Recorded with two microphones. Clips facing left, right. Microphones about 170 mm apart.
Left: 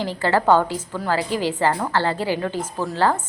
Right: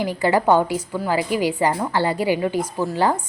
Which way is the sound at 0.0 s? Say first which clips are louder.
Right 1 dB; 10° right (ahead or behind).